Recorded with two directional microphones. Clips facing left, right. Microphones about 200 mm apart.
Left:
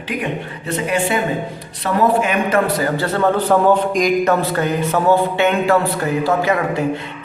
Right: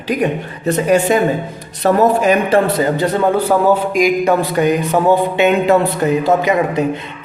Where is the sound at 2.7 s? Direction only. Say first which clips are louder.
Right 4 dB; 20° right (ahead or behind).